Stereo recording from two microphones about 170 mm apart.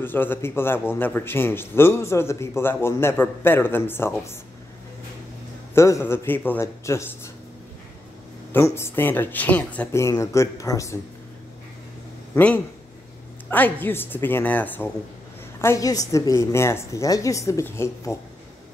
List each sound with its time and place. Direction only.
0.0 s a man's voice: 10° left (ahead or behind)
5.8 s a man's voice: 15° left (ahead or behind)
8.5 s a man's voice: 15° left (ahead or behind)
13.5 s a man's voice: 10° left (ahead or behind)